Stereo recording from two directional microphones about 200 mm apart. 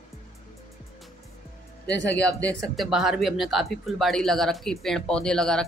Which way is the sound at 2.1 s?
5° left (ahead or behind).